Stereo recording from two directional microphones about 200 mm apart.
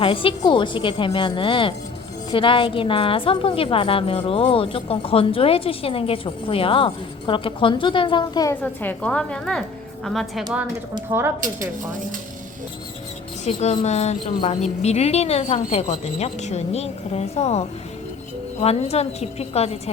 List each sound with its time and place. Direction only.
0.0 s a woman's voice: 25° left (ahead or behind)
8.6 s a woman's voice: 10° left (ahead or behind)
11.1 s a woman's voice: 10° right (ahead or behind)
13.4 s a woman's voice: 35° left (ahead or behind)